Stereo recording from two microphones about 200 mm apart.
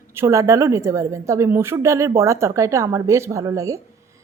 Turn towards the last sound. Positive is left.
turn(degrees=-15)  # may be behind; listen again after turning